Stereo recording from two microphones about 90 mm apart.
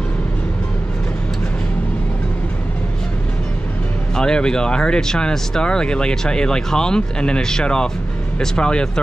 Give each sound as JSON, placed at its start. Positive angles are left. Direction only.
{"t": 4.2, "sound": "speech", "side_deg": 10}